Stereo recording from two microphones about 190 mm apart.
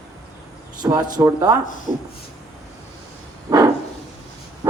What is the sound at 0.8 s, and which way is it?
Speech, 20° right (ahead or behind).